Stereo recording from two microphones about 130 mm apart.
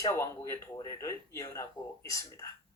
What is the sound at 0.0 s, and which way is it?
Speech, 20° left (ahead or behind).